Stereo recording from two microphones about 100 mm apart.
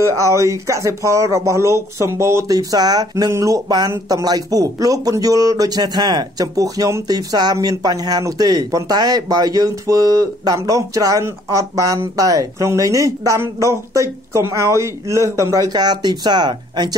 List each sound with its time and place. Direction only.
0.2 s speech: 30° right (ahead or behind); by 16.9 s 45° right (ahead or behind)